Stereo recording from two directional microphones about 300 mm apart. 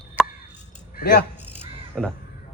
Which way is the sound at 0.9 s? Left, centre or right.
Left.